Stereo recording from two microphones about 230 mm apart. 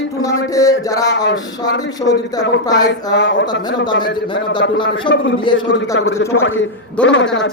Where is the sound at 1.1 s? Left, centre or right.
Left.